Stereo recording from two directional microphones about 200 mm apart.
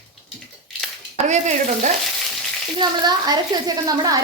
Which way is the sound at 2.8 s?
20° right (ahead or behind).